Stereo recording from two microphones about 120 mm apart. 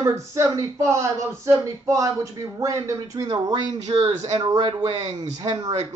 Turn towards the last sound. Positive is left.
turn(degrees=-35)  # may be behind; listen again after turning